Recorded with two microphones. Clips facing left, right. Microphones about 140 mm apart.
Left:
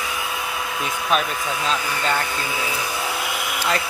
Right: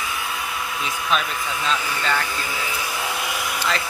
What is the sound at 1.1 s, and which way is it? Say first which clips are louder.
Speech: left 2 dB; 45° left (ahead or behind).